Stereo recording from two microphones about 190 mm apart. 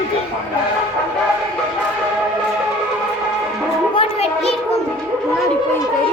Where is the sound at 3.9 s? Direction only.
30° left (ahead or behind).